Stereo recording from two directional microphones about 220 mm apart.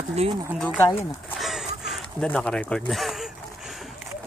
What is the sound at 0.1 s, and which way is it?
Speech, 30° right (ahead or behind).